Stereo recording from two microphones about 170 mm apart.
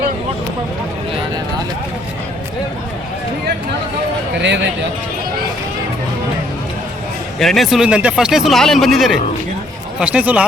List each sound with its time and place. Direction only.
4.4 s speech: 90° right
7.3 s speech: centre (ahead or behind)